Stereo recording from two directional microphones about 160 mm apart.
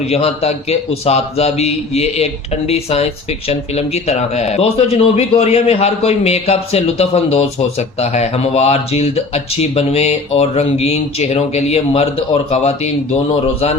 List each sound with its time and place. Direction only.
0.1 s a man's voice: 40° left (ahead or behind)